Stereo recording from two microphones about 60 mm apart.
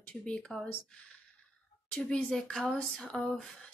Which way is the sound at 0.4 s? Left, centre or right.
Centre.